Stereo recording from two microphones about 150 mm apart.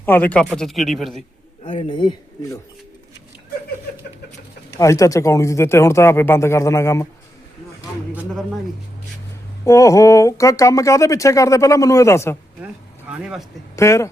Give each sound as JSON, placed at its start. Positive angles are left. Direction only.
{"t": 0.0, "sound": "speech", "side_deg": 15}
{"t": 1.6, "sound": "a man's voice", "side_deg": 35}
{"t": 4.8, "sound": "speech", "side_deg": 20}
{"t": 9.6, "sound": "speech", "side_deg": 20}
{"t": 12.6, "sound": "speech", "side_deg": -10}
{"t": 13.7, "sound": "speech", "side_deg": 20}